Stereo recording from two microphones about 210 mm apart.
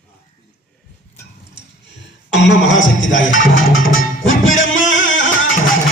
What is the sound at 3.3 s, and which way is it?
Speech, 65° left (ahead or behind).